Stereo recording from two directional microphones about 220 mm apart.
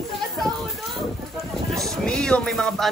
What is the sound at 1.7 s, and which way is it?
Speech, centre (ahead or behind).